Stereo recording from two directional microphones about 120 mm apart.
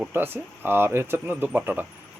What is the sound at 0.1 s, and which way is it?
Speech, 20° right (ahead or behind).